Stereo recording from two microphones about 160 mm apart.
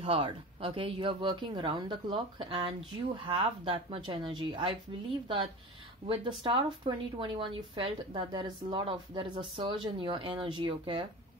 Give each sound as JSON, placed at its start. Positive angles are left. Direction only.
{"t": 0.0, "sound": "a woman's voice", "side_deg": -30}
{"t": 6.0, "sound": "a woman's voice", "side_deg": -30}